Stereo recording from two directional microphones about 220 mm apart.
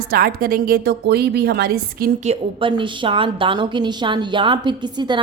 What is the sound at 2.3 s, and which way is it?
A woman's voice, 20° right (ahead or behind).